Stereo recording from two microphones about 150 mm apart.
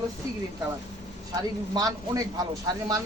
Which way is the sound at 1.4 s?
25° right (ahead or behind).